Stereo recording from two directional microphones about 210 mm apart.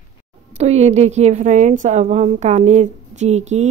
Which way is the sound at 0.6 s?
30° right (ahead or behind).